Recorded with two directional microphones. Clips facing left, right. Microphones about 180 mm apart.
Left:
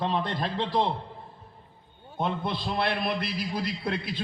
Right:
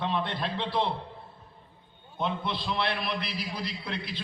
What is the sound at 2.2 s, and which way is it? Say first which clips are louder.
A man's voice: left 2 dB; 50° left (ahead or behind).